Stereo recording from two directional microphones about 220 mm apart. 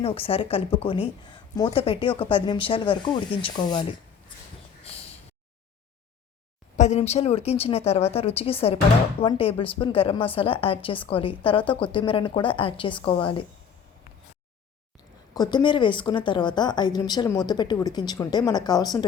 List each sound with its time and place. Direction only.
0.0 s a woman's voice: 25° left (ahead or behind)
6.7 s a woman's voice: 30° left (ahead or behind)
15.4 s a woman's voice: 20° left (ahead or behind)